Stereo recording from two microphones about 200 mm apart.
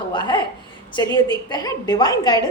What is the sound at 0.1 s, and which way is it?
A woman's voice, 20° left (ahead or behind).